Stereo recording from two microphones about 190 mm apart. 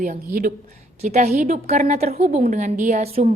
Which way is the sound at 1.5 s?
35° right (ahead or behind).